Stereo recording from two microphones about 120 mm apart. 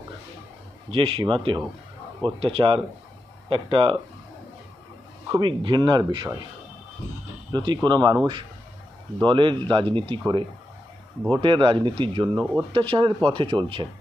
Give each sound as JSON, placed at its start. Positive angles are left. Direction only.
{"t": 0.9, "sound": "speech", "side_deg": -50}
{"t": 5.4, "sound": "speech", "side_deg": -40}
{"t": 7.5, "sound": "speech", "side_deg": -40}
{"t": 11.3, "sound": "speech", "side_deg": -45}